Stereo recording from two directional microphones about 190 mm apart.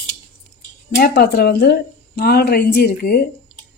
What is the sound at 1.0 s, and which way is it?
Speech, 55° left (ahead or behind).